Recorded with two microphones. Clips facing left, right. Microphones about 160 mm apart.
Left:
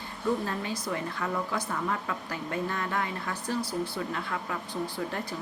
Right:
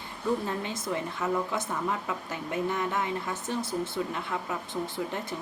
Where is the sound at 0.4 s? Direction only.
20° right (ahead or behind).